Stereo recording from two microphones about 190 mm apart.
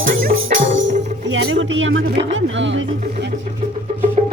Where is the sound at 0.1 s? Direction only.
45° right (ahead or behind).